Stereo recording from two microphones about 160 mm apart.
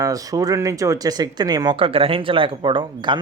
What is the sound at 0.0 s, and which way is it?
Speech, 20° right (ahead or behind).